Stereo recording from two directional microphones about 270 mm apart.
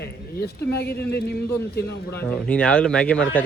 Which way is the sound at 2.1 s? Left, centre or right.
Centre.